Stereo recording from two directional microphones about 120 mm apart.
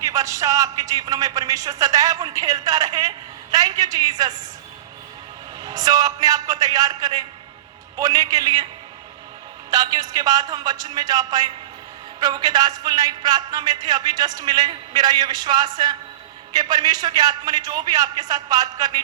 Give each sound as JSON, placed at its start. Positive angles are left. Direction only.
{"t": 0.0, "sound": "a man's voice", "side_deg": -30}
{"t": 5.6, "sound": "a man's voice", "side_deg": -30}
{"t": 9.6, "sound": "a man's voice", "side_deg": -35}